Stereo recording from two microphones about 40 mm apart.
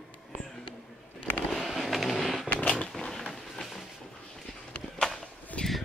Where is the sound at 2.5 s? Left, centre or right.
Left.